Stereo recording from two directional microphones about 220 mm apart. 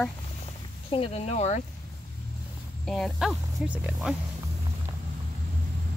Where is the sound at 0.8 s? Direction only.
25° left (ahead or behind).